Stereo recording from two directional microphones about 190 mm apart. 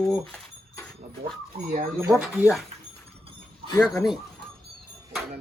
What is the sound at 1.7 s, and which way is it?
Speech, 50° right (ahead or behind).